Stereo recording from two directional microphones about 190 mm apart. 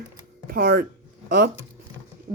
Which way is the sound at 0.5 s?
50° right (ahead or behind).